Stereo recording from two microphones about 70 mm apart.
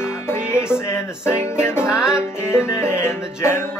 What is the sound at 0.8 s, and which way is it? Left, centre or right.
Music, left.